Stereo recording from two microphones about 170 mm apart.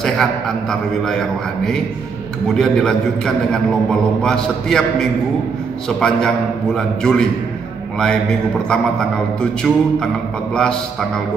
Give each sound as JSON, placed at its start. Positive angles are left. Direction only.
{"t": 0.0, "sound": "a man's voice", "side_deg": 5}